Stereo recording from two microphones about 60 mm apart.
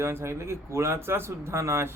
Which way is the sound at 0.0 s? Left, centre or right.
Right.